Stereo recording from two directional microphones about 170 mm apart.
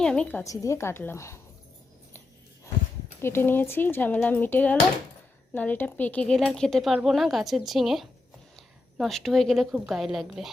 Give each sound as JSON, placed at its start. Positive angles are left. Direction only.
{"t": 0.0, "sound": "speech", "side_deg": 5}
{"t": 3.2, "sound": "a woman's voice", "side_deg": 15}